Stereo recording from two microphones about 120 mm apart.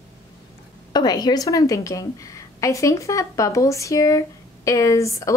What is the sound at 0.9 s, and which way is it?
A woman's voice, 35° left (ahead or behind).